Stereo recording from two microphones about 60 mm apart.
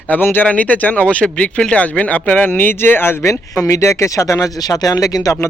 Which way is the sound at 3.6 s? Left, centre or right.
Left.